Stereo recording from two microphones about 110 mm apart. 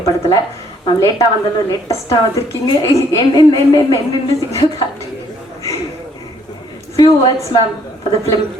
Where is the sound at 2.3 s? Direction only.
25° left (ahead or behind).